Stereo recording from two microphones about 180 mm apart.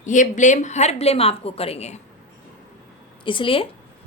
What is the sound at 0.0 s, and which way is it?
A woman's voice, 45° left (ahead or behind).